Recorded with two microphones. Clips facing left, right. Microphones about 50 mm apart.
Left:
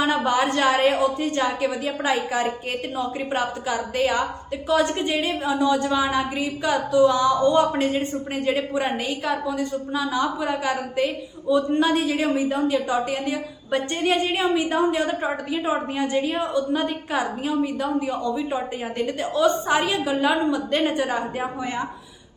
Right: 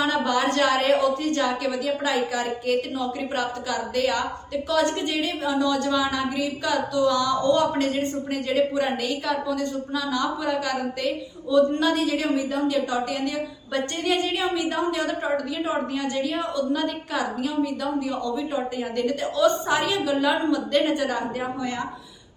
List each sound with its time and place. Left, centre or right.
0.0 s a woman's voice: centre